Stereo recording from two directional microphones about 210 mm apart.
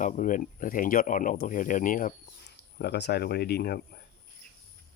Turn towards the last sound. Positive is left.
turn(degrees=50)  # may be behind; listen again after turning